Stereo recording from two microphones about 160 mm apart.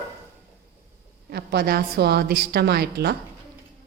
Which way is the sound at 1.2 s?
85° right.